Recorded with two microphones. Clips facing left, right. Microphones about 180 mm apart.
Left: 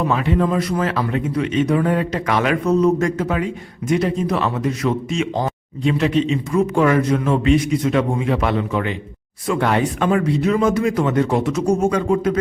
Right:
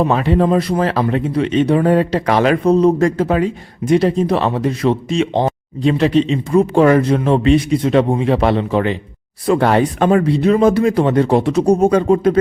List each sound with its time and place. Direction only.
0.0 s speech: 35° right (ahead or behind)